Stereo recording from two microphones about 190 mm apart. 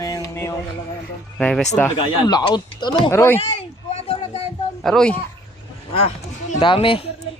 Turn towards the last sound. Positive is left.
turn(degrees=30)  # may be behind; listen again after turning